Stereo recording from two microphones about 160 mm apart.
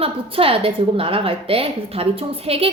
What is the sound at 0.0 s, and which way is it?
A woman's voice, 35° right (ahead or behind).